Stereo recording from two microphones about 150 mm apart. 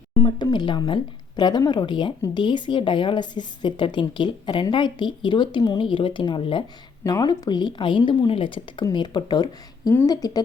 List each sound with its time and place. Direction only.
0.3 s speech: 30° left (ahead or behind)